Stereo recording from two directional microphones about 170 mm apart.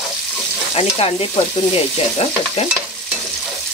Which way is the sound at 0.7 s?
35° left (ahead or behind).